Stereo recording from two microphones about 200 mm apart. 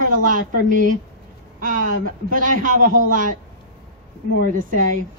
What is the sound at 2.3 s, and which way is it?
Speech, 40° right (ahead or behind).